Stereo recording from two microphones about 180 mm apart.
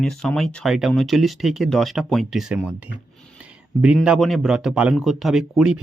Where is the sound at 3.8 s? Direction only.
5° right (ahead or behind).